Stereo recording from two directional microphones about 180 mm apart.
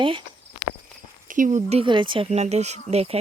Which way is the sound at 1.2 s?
45° right (ahead or behind).